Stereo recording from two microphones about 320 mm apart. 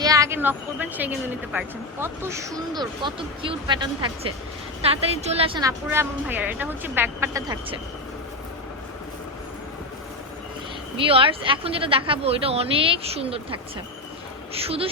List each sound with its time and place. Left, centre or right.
0.0 s a woman's voice: centre
11.0 s a woman's voice: centre